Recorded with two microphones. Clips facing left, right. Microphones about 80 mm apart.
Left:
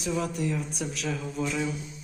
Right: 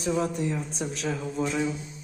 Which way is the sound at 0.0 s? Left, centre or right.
Right.